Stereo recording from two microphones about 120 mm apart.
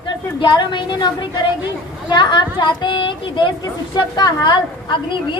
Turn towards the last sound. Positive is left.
turn(degrees=40)  # may be behind; listen again after turning